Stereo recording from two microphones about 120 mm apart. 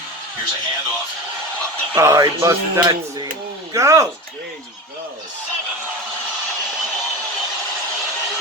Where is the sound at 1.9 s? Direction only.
25° right (ahead or behind).